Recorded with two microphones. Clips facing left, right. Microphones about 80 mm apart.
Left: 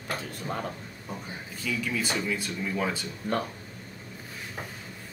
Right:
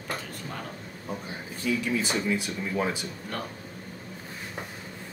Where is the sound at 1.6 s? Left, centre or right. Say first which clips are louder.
Right 3 dB; right; by 3.1 s centre.